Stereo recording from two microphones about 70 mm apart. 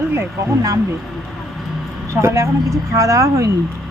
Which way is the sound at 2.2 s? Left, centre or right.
Right.